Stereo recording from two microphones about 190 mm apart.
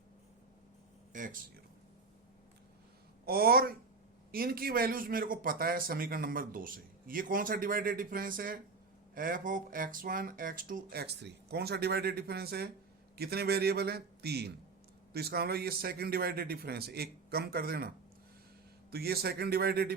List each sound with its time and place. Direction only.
1.1 s speech: 45° right (ahead or behind)
3.2 s a man's voice: 50° right (ahead or behind)